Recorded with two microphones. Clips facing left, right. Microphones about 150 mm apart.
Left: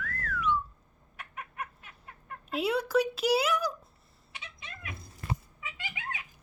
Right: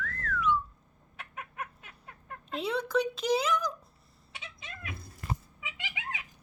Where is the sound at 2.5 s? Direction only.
10° left (ahead or behind).